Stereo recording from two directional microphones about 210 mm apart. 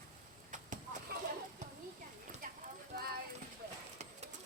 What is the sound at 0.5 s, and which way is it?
Vehicle, 35° right (ahead or behind).